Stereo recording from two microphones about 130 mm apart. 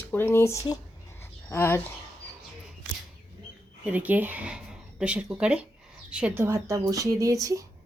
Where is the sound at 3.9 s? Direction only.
10° right (ahead or behind).